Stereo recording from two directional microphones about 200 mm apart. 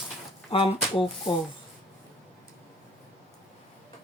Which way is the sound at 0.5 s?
30° left (ahead or behind).